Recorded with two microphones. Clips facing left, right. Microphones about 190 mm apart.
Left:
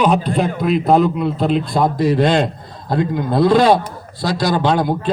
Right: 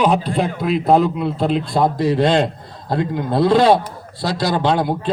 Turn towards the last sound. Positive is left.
turn(degrees=-30)  # may be behind; listen again after turning